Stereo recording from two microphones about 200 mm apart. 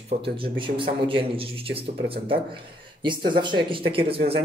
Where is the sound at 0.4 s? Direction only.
25° right (ahead or behind).